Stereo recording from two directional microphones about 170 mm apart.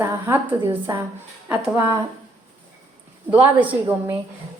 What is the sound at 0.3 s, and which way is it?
Speech, 15° right (ahead or behind).